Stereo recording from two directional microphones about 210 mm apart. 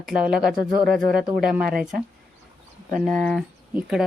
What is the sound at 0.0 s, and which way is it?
A woman's voice, centre (ahead or behind).